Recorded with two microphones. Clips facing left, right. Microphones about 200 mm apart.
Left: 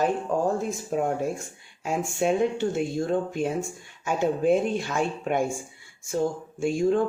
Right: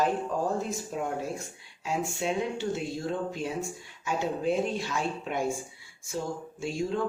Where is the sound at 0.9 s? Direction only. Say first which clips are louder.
Left 7 dB; 50° left (ahead or behind).